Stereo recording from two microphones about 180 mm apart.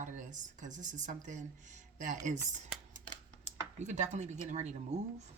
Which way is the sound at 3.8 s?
40° right (ahead or behind).